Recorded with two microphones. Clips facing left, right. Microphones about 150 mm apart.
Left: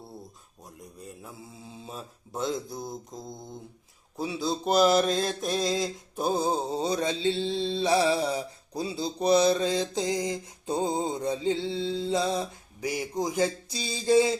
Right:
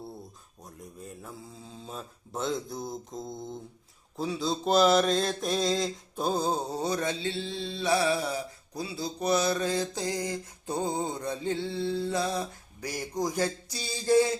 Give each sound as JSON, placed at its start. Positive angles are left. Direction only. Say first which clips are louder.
{"t": 0.8, "sound": "mantra", "louder": "right 1 dB", "side_deg": 0}
{"t": 6.3, "sound": "mantra", "louder": "left 3 dB", "side_deg": 15}
{"t": 12.8, "sound": "a sound", "louder": "left 2 dB", "side_deg": 10}